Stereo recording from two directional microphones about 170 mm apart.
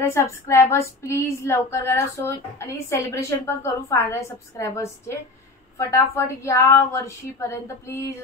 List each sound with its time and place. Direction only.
0.0 s speech: 15° left (ahead or behind)